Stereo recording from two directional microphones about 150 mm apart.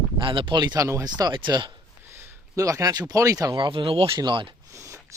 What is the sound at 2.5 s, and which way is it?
A man's voice, 20° right (ahead or behind).